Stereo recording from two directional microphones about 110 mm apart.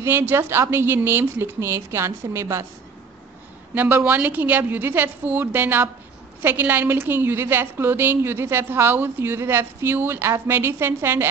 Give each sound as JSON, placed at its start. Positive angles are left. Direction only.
{"t": 0.0, "sound": "a woman's voice", "side_deg": -20}
{"t": 3.7, "sound": "a woman's voice", "side_deg": -15}